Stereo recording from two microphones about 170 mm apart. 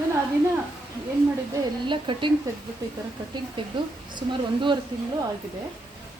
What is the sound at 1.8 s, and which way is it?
Speech, 30° right (ahead or behind).